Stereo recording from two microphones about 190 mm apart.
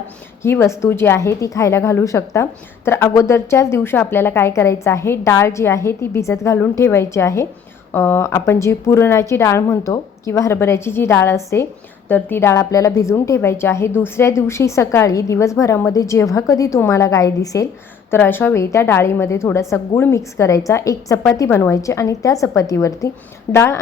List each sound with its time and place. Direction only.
0.4 s a woman's voice: 10° left (ahead or behind)